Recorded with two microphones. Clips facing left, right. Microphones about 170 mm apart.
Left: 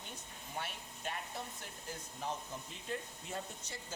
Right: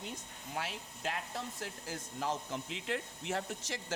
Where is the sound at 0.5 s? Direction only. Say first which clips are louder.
Right 4 dB; 90° right.